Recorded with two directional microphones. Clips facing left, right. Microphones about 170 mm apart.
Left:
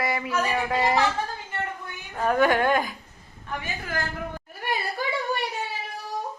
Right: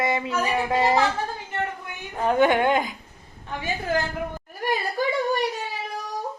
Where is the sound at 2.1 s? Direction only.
20° right (ahead or behind).